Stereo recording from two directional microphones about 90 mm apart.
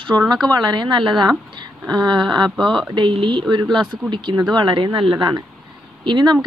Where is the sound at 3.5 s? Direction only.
55° right (ahead or behind).